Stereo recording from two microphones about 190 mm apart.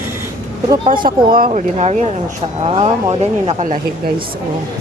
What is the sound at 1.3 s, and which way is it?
Speech, 50° right (ahead or behind).